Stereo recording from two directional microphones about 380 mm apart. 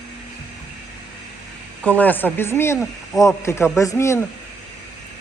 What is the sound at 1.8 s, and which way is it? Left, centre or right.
A man's voice, centre.